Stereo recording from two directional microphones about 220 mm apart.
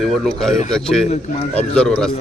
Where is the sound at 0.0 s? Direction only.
Centre (ahead or behind).